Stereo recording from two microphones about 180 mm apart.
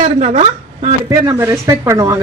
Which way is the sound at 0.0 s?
45° right (ahead or behind).